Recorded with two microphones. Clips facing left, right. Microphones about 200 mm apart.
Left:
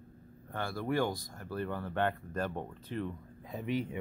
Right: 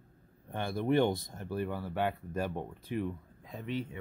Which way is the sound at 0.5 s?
20° right (ahead or behind).